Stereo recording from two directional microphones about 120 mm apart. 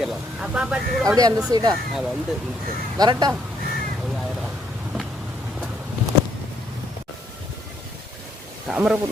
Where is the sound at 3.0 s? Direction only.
35° right (ahead or behind).